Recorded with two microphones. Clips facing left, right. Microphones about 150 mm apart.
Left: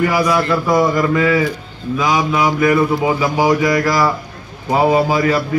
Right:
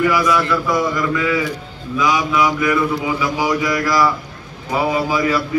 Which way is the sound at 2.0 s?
40° left (ahead or behind).